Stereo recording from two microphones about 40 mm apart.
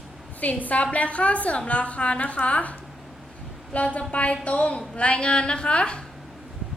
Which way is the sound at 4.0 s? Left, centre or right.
Left.